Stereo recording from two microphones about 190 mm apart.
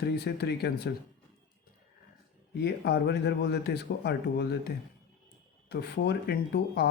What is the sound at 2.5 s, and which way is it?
Speech, 60° left (ahead or behind).